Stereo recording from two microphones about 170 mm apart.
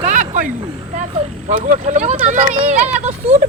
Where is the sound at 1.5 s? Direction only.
45° right (ahead or behind).